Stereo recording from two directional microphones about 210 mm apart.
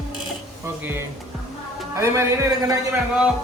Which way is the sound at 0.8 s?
10° right (ahead or behind).